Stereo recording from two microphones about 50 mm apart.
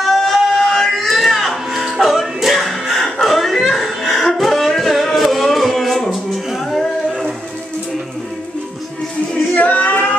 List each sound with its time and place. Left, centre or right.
0.0 s a sound: centre
6.6 s music: centre
9.5 s music: left